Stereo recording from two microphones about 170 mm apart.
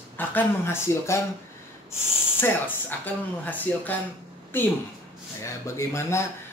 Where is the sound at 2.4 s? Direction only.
10° left (ahead or behind).